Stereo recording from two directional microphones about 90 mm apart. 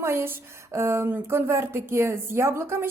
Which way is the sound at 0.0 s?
25° right (ahead or behind).